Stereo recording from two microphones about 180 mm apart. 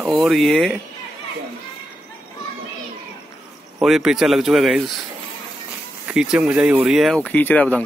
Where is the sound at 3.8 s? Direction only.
Centre (ahead or behind).